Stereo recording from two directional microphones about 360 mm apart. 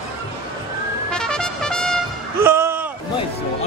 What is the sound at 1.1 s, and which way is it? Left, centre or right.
Trumpet, centre.